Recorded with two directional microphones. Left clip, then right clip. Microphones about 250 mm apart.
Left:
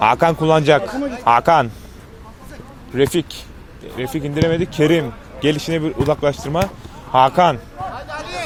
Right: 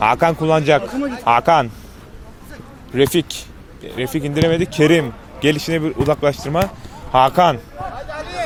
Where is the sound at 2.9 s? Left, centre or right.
Centre.